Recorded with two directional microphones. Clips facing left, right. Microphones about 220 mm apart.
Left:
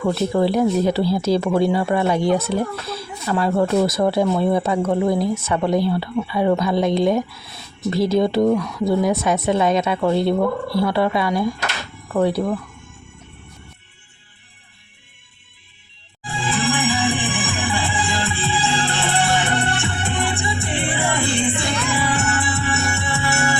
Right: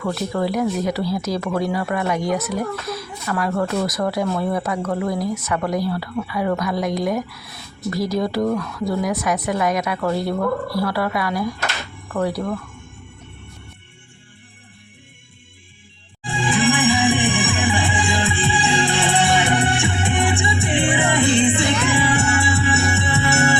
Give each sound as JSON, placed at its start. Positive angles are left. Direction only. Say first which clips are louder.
{"t": 0.4, "sound": "speech", "louder": "left 3 dB", "side_deg": 30}
{"t": 8.4, "sound": "speech", "louder": "left 4 dB", "side_deg": 15}
{"t": 16.2, "sound": "music", "louder": "right 4 dB", "side_deg": -15}